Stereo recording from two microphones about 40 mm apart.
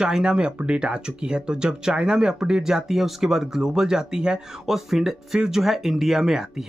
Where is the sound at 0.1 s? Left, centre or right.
Centre.